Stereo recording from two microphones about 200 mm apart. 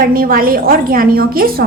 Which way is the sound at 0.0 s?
45° right (ahead or behind).